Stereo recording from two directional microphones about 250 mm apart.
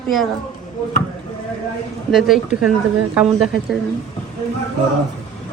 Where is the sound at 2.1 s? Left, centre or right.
Centre.